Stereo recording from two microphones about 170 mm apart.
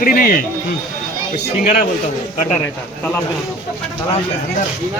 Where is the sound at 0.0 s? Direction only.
55° left (ahead or behind).